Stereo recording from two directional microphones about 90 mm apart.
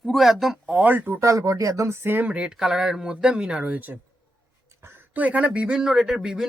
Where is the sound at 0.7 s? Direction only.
15° right (ahead or behind).